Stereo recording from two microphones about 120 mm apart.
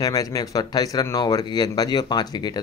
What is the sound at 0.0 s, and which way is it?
Speech, 30° left (ahead or behind).